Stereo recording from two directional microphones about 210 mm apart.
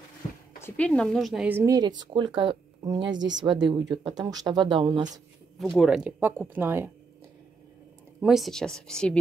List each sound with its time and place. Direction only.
0.6 s a woman's voice: 10° left (ahead or behind); by 3.2 s 20° right (ahead or behind)
3.2 s speech: 60° right (ahead or behind)
3.4 s speech: 20° right (ahead or behind)
5.8 s a woman's voice: 5° right (ahead or behind)
8.2 s a woman's voice: centre (ahead or behind)